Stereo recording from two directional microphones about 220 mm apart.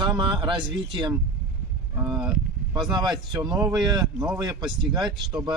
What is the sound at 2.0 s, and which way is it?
Speech, 5° right (ahead or behind).